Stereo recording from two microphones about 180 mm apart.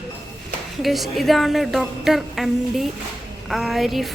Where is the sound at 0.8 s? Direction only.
Centre (ahead or behind).